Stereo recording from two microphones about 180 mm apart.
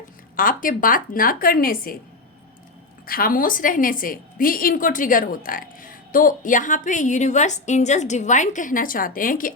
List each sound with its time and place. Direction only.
0.3 s a woman's voice: 50° left (ahead or behind)
3.1 s a woman's voice: 55° left (ahead or behind)